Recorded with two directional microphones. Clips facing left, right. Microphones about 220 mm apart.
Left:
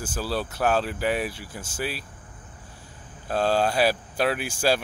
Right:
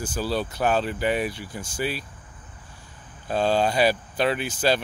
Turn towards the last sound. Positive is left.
turn(degrees=10)  # may be behind; listen again after turning